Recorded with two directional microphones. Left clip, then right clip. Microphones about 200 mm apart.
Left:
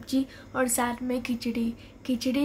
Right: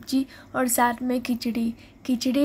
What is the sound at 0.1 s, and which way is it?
A woman's voice, 25° right (ahead or behind).